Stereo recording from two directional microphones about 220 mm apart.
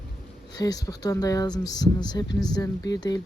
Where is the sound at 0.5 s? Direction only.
15° left (ahead or behind).